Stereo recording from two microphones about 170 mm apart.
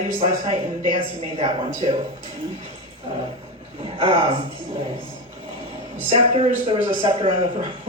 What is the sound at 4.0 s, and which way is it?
Speech, 35° right (ahead or behind).